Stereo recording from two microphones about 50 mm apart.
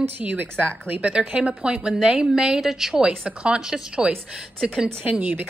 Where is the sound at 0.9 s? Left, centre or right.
Right; by 3.0 s centre.